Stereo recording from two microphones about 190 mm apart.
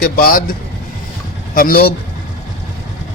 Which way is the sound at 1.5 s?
50° left (ahead or behind).